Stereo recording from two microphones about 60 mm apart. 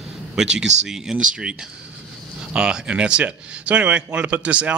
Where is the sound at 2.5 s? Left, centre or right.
Centre.